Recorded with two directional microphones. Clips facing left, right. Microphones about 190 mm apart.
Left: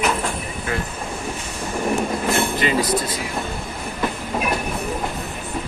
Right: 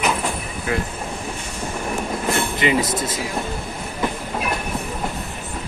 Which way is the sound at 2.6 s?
20° right (ahead or behind).